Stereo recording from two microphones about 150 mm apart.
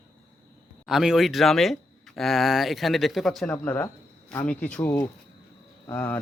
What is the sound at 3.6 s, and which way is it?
Speech, 15° left (ahead or behind).